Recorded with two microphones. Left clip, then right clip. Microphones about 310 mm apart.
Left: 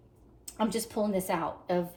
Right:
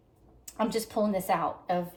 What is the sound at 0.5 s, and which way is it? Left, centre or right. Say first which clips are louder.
A woman's voice: right 2 dB; right.